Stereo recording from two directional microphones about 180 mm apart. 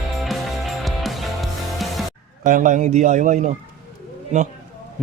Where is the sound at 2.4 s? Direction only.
45° right (ahead or behind).